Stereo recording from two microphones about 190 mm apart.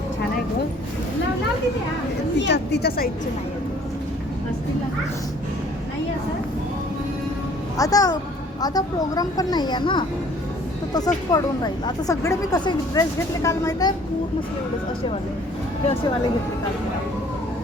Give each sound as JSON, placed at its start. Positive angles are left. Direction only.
{"t": 2.4, "sound": "a woman's voice", "side_deg": 65}
{"t": 7.8, "sound": "speech", "side_deg": 20}